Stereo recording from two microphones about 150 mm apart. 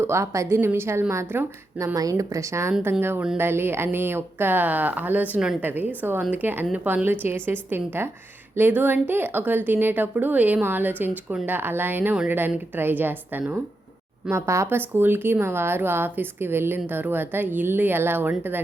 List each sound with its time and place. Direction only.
0.0 s a woman's voice: 20° right (ahead or behind)